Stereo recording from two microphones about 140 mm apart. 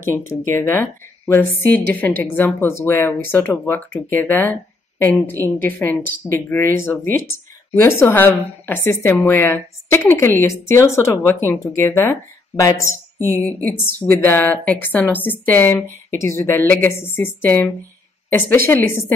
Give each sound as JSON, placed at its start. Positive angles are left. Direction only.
{"t": 0.3, "sound": "a woman's voice", "side_deg": 20}
{"t": 18.7, "sound": "a woman's voice", "side_deg": 15}